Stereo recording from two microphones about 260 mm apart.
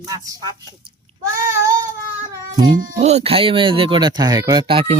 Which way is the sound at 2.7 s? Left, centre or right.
Right.